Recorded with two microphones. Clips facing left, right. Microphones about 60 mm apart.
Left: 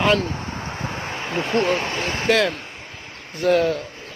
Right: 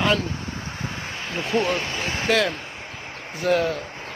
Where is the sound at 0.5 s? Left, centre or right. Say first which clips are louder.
Left 3 dB; left.